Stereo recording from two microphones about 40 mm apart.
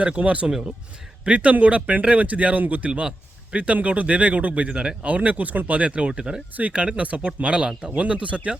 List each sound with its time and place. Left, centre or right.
0.2 s speech: right
6.6 s speech: right